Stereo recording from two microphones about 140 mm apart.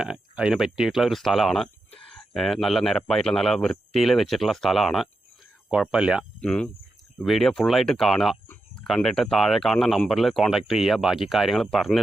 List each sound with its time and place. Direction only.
0.0 s speech: 5° right (ahead or behind)
6.4 s speech: 5° left (ahead or behind)